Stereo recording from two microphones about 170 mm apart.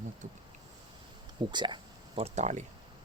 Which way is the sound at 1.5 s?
25° right (ahead or behind).